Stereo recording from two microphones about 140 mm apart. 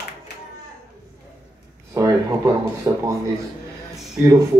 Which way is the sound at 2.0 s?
25° right (ahead or behind).